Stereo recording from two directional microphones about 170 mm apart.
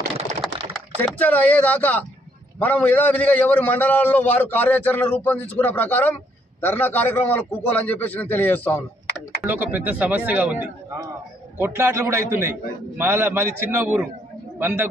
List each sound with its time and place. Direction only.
0.6 s typing: 35° right (ahead or behind)
1.0 s a man's voice: 10° left (ahead or behind)
9.5 s a man's voice: 10° right (ahead or behind)